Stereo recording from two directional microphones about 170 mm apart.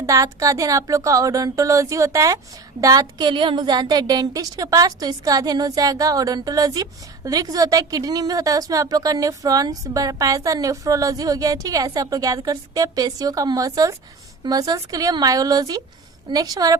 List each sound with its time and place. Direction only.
0.0 s a woman's voice: 20° right (ahead or behind)